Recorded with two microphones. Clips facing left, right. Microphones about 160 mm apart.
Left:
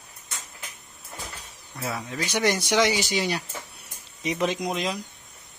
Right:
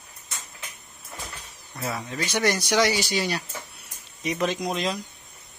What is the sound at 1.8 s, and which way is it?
Speech, 5° left (ahead or behind).